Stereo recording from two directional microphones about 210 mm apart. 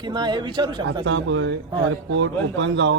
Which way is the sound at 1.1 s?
60° right (ahead or behind).